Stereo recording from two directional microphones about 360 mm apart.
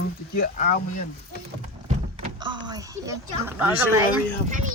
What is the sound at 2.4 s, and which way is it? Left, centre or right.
Speech, centre.